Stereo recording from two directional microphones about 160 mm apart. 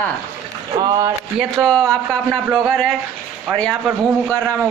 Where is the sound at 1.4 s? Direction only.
Centre (ahead or behind).